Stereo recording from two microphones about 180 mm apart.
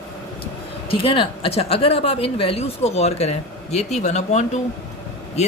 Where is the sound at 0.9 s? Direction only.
30° left (ahead or behind).